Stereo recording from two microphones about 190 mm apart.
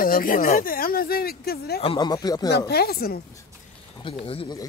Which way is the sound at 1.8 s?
25° left (ahead or behind).